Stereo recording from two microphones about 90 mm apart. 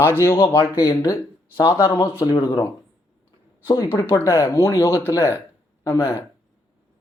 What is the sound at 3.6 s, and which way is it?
Speech, 50° left (ahead or behind).